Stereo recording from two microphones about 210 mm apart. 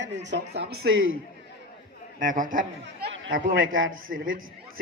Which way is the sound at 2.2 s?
40° right (ahead or behind).